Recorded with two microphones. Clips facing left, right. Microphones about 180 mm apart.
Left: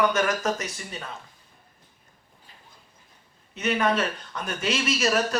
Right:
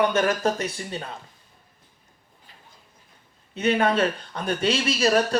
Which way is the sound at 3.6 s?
30° right (ahead or behind).